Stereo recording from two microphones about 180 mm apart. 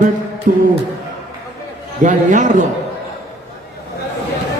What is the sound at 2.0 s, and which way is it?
Speech, 45° right (ahead or behind).